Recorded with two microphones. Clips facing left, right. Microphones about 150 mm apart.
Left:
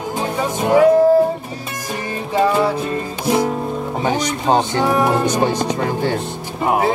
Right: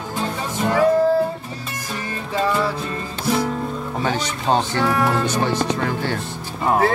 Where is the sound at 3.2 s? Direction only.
15° left (ahead or behind).